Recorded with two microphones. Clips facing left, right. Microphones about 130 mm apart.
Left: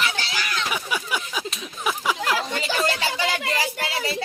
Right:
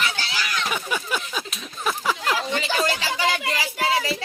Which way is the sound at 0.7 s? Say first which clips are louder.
Even; 5° left (ahead or behind).